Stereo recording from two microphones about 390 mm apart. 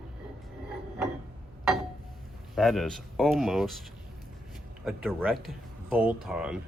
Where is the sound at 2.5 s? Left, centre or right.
Centre.